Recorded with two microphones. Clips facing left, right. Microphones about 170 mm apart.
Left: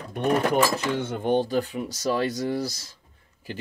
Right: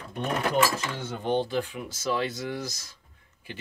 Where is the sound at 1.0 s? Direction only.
50° left (ahead or behind).